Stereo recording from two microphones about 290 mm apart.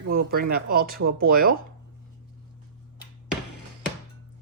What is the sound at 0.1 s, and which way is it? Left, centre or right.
Speech, right.